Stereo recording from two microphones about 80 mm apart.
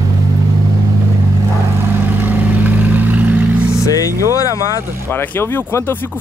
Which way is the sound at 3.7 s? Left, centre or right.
Left.